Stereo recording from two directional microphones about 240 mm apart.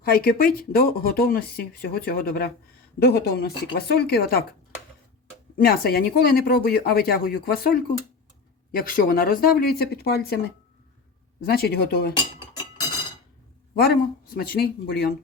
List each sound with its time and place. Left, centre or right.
0.0 s speech: left
5.5 s speech: left
13.7 s speech: left